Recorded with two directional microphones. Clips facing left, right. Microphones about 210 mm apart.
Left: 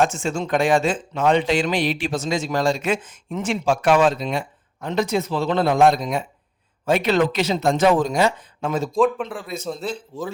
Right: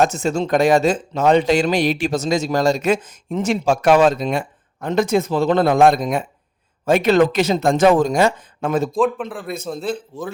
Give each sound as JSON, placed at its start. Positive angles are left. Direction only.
{"t": 0.0, "sound": "speech", "side_deg": -40}
{"t": 9.0, "sound": "speech", "side_deg": 0}
{"t": 9.4, "sound": "a man's voice", "side_deg": -55}